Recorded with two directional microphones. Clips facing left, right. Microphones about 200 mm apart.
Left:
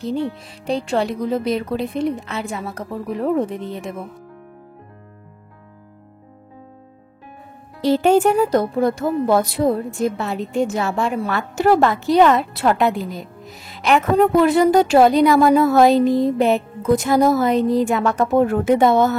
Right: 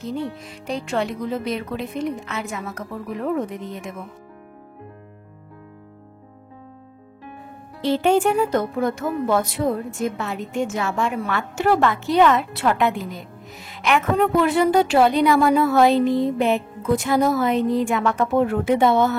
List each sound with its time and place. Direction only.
0.0 s a woman's voice: 30° left (ahead or behind)
7.8 s a woman's voice: 40° left (ahead or behind)